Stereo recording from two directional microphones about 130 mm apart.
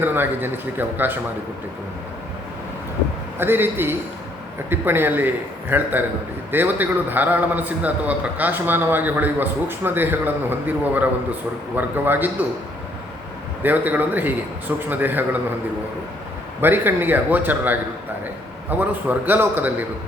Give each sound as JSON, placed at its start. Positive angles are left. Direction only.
{"t": 0.0, "sound": "a man's voice", "side_deg": -15}
{"t": 3.3, "sound": "a man's voice", "side_deg": -15}
{"t": 13.6, "sound": "a man's voice", "side_deg": -15}
{"t": 16.6, "sound": "a man's voice", "side_deg": -15}